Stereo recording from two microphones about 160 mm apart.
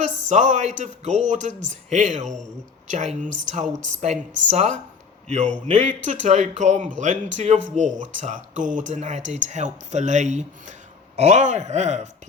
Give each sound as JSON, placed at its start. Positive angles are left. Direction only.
{"t": 0.0, "sound": "speech", "side_deg": -50}